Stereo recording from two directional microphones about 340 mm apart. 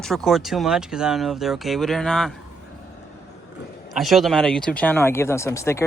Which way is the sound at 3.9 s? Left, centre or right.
Centre.